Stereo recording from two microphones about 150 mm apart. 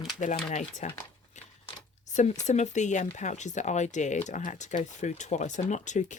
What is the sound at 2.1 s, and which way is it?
Speech, 50° left (ahead or behind).